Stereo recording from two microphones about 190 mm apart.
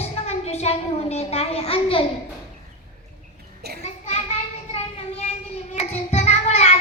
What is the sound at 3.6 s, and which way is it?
Speech, 60° right (ahead or behind).